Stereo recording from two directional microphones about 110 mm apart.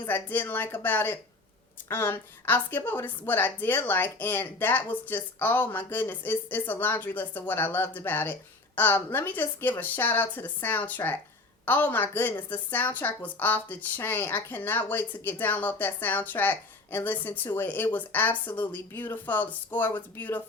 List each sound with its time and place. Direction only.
0.0 s a woman's voice: 20° left (ahead or behind)